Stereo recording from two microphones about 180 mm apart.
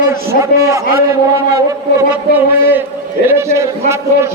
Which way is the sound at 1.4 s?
20° right (ahead or behind).